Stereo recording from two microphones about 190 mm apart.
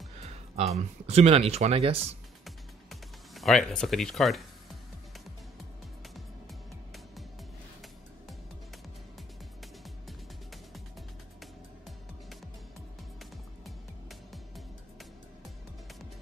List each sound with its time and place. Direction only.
0.2 s speech: 35° right (ahead or behind)
2.4 s music: centre (ahead or behind)
9.8 s music: centre (ahead or behind)
13.7 s music: centre (ahead or behind)